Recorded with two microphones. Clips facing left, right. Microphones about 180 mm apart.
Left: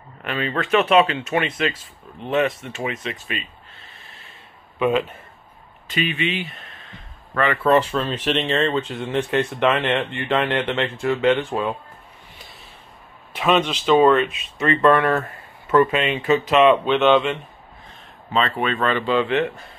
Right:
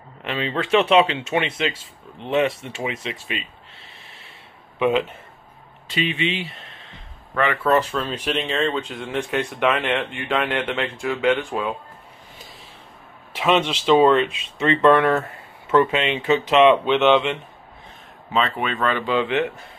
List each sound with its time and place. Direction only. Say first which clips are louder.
0.2 s speech: even; 25° right (ahead or behind)
4.7 s speech: even; 20° right (ahead or behind)
7.7 s speech: left 3 dB; 10° left (ahead or behind)
8.2 s speech: left 2 dB; 5° right (ahead or behind)
13.4 s speech: even; 10° right (ahead or behind)
14.1 s speech: even; 25° right (ahead or behind)
18.3 s speech: left 1 dB; 10° right (ahead or behind)